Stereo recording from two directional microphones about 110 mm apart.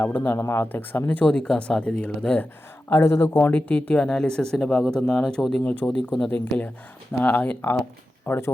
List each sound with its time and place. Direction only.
0.0 s speech: 20° left (ahead or behind)
2.9 s speech: 25° left (ahead or behind); by 6.3 s centre (ahead or behind)
6.3 s speech: 15° left (ahead or behind)